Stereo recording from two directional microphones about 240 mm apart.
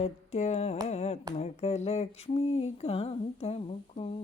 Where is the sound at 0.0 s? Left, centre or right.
Left.